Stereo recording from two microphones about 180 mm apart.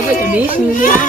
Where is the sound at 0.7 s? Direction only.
50° left (ahead or behind).